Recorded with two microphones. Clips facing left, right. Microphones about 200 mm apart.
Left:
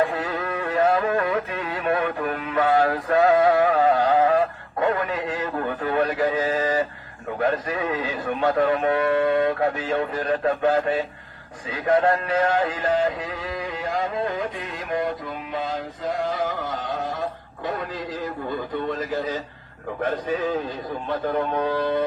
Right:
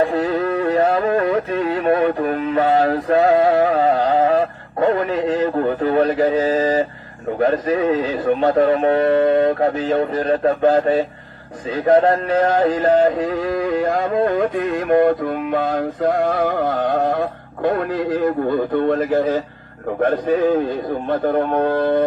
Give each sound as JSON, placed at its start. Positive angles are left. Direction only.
{"t": 0.0, "sound": "music", "side_deg": -40}
{"t": 7.3, "sound": "speech", "side_deg": -40}
{"t": 11.7, "sound": "a sound", "side_deg": -35}
{"t": 21.1, "sound": "speech", "side_deg": -55}